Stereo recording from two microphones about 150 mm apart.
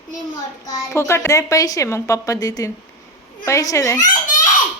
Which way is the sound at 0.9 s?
20° left (ahead or behind).